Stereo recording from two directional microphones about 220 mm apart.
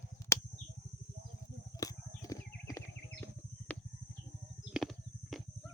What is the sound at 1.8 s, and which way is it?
Horse, 15° left (ahead or behind).